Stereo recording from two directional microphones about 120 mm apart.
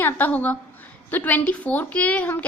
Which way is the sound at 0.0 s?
15° left (ahead or behind).